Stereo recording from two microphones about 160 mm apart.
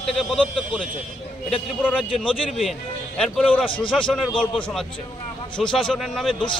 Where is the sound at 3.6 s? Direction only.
35° left (ahead or behind).